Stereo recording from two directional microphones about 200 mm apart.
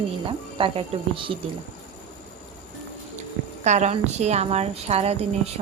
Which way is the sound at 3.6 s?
35° right (ahead or behind).